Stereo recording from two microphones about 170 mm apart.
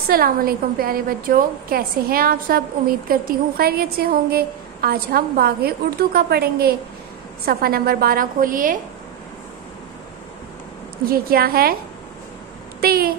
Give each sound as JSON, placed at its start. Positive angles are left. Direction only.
{"t": 0.1, "sound": "a woman's voice", "side_deg": -60}
{"t": 11.1, "sound": "a woman's voice", "side_deg": -60}
{"t": 12.8, "sound": "a woman's voice", "side_deg": -60}